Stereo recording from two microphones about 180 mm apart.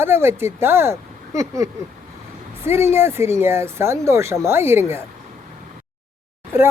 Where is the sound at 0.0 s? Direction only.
15° right (ahead or behind).